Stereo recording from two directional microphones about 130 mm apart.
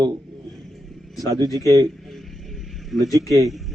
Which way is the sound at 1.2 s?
30° right (ahead or behind).